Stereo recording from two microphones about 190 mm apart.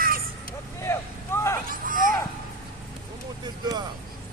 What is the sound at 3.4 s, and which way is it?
Vehicle, 20° right (ahead or behind).